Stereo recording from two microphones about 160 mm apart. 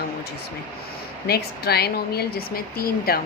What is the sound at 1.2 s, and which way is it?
A woman's voice, 80° left.